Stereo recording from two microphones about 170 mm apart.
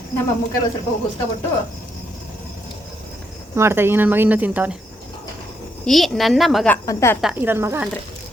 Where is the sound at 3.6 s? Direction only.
15° right (ahead or behind).